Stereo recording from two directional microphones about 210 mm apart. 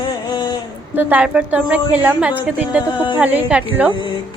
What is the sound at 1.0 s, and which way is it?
Speech, 10° right (ahead or behind).